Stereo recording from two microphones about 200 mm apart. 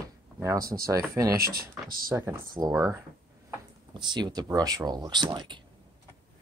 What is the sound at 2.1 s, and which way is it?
Speech, 15° right (ahead or behind).